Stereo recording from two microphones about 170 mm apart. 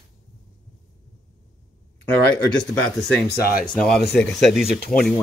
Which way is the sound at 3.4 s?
60° left (ahead or behind).